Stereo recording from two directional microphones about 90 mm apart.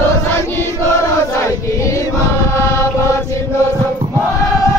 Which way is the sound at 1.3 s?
35° left (ahead or behind).